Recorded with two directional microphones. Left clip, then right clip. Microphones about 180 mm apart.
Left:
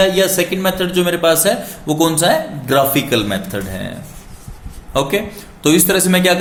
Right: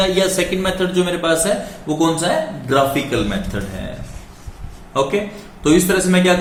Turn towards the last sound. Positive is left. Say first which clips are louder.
# left 2 dB
turn(degrees=60)  # may be behind; listen again after turning